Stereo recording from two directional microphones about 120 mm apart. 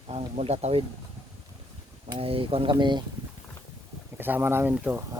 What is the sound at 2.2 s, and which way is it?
Speech, 50° right (ahead or behind).